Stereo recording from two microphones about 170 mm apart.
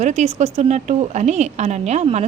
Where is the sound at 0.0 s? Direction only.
40° right (ahead or behind).